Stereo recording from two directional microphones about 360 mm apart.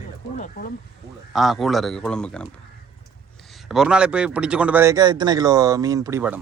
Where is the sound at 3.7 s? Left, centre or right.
Centre.